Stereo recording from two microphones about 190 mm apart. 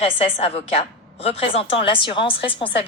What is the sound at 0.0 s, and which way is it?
A woman's voice, 30° left (ahead or behind).